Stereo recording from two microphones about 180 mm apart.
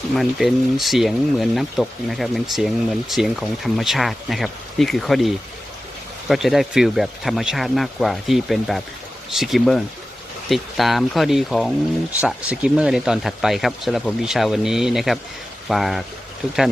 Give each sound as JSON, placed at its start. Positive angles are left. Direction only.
{"t": 0.1, "sound": "speech", "side_deg": 0}